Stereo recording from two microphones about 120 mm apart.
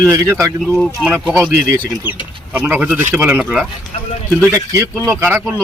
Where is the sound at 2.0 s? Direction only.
15° right (ahead or behind).